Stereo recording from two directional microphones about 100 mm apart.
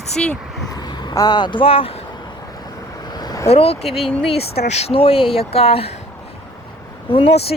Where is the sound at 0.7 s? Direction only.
45° left (ahead or behind); by 2.0 s 70° left (ahead or behind).